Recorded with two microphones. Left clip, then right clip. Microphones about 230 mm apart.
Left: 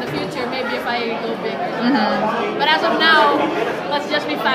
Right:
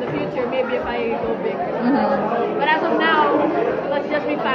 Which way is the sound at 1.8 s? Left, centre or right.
Left.